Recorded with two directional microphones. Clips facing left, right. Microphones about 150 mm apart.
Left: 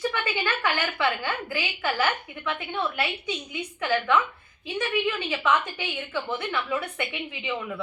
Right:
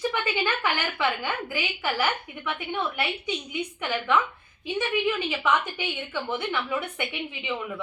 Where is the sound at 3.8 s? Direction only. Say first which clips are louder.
Left 2 dB; 15° right (ahead or behind).